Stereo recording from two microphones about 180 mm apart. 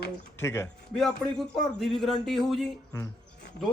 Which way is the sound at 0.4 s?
15° left (ahead or behind).